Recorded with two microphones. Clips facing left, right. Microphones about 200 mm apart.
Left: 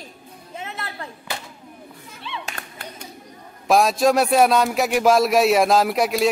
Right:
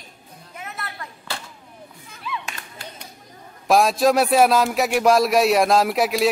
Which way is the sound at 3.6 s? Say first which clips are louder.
Even; centre (ahead or behind).